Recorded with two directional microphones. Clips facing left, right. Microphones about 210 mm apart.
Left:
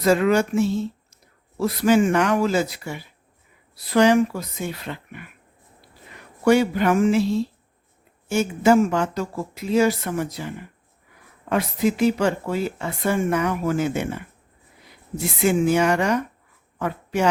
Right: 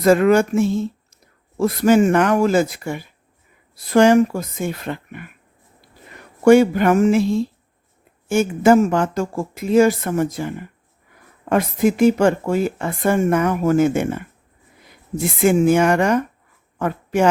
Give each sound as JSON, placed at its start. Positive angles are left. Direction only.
{"t": 0.0, "sound": "speech", "side_deg": -50}
{"t": 6.4, "sound": "speech", "side_deg": -50}
{"t": 16.7, "sound": "a sound", "side_deg": -50}